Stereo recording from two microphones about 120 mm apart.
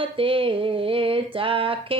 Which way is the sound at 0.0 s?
50° right (ahead or behind).